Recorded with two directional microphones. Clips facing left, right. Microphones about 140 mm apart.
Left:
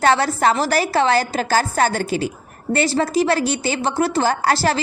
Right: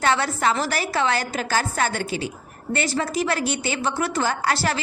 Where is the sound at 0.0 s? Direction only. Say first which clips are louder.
Left 5 dB; 35° left (ahead or behind).